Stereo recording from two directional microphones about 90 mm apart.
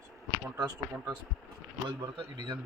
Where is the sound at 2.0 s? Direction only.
50° right (ahead or behind).